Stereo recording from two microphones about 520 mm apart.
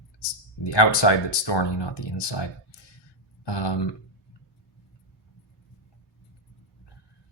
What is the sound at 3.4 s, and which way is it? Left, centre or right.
Speech, left.